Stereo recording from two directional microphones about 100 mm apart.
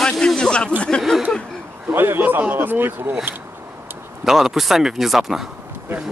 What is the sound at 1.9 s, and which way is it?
A man's voice, 20° right (ahead or behind).